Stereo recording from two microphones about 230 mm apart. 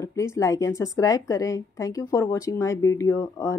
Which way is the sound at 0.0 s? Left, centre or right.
Centre.